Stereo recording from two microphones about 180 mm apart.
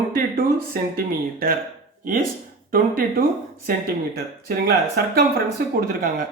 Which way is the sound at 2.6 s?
55° right (ahead or behind).